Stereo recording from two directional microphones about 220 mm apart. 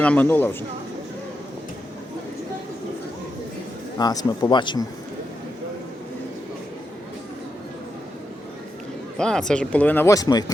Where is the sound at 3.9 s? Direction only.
20° left (ahead or behind).